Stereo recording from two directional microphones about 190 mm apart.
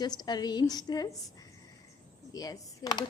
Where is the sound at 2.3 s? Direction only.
20° left (ahead or behind).